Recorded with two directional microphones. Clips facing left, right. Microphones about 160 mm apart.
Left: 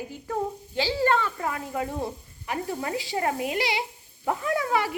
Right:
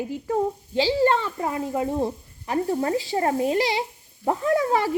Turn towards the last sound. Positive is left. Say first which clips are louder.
# right 4 dB
turn(degrees=-40)  # may be behind; listen again after turning